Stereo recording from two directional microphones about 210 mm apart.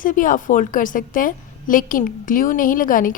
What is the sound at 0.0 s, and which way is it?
A woman's voice, 40° left (ahead or behind).